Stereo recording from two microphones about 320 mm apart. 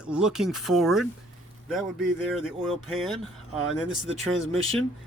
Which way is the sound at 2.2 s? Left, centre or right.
Centre.